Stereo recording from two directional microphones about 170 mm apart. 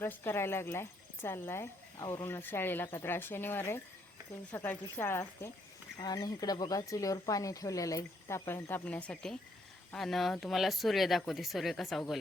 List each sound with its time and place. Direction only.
0.0 s speech: 15° left (ahead or behind)